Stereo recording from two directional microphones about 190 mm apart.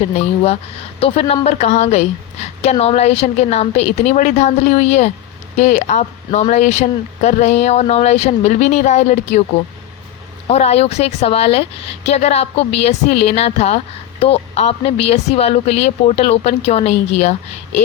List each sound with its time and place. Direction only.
0.9 s speech: 30° left (ahead or behind)
10.5 s speech: 35° left (ahead or behind)